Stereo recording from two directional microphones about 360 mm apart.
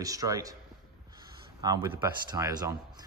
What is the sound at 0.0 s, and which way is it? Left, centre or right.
Speech, centre.